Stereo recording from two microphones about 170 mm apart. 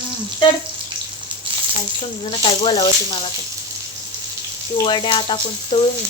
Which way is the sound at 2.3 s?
25° left (ahead or behind).